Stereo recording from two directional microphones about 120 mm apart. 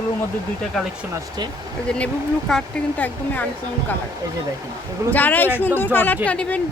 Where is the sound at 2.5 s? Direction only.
15° left (ahead or behind).